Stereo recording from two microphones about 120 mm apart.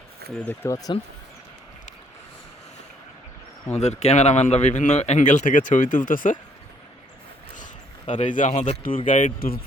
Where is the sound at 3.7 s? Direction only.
70° left (ahead or behind); by 6.4 s 90° left.